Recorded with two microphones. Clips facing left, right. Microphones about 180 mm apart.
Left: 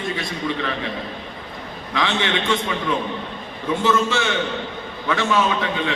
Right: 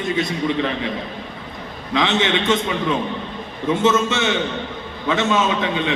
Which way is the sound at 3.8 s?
20° right (ahead or behind).